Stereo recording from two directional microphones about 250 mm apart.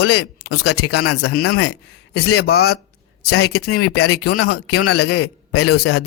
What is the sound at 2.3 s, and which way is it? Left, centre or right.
Speech, left.